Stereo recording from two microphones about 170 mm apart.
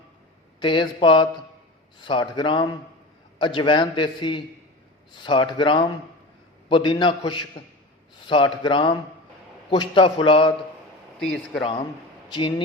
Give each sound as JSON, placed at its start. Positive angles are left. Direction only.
{"t": 0.6, "sound": "a man's voice", "side_deg": 30}
{"t": 11.2, "sound": "speech", "side_deg": 5}
{"t": 11.6, "sound": "a man's voice", "side_deg": 30}